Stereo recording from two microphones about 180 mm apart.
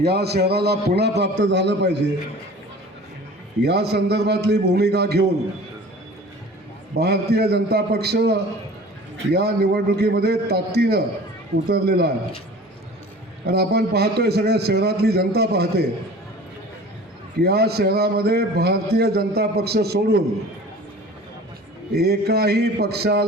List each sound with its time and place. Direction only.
0.0 s a man's voice: 65° right (ahead or behind)
3.6 s a man's voice: 65° right (ahead or behind)
6.9 s a man's voice: 60° right (ahead or behind)
13.4 s a man's voice: 65° right (ahead or behind)
17.4 s a man's voice: 60° right (ahead or behind)
21.9 s a man's voice: 60° right (ahead or behind)